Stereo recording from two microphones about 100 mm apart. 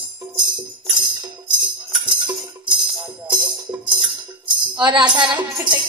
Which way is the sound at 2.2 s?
50° right (ahead or behind).